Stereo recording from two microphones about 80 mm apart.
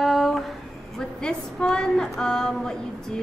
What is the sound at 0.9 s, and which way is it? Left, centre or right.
A woman's voice, centre.